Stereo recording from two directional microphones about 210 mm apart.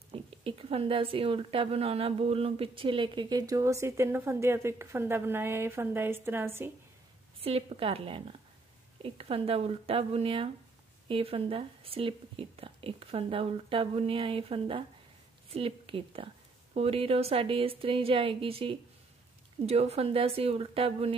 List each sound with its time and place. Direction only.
0.1 s speech: 25° right (ahead or behind); by 6.7 s 10° right (ahead or behind)
7.4 s a woman's voice: 25° right (ahead or behind)